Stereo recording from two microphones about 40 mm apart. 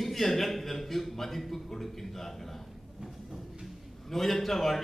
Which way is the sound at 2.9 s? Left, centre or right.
Centre.